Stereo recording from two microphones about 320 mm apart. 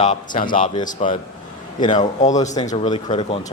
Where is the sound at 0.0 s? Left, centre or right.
Left.